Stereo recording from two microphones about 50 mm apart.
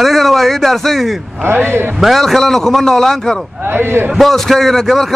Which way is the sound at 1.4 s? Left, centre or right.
Right.